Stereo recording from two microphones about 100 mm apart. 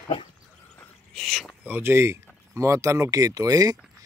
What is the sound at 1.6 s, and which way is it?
Speech, 20° right (ahead or behind).